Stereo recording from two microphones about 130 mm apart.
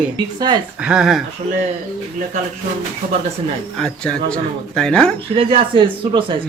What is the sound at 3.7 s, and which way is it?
Speech, 5° left (ahead or behind).